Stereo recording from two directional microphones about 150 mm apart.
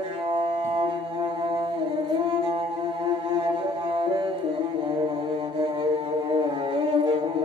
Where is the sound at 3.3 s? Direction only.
35° right (ahead or behind).